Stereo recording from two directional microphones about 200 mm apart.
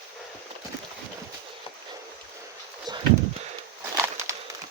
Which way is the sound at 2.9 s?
20° right (ahead or behind).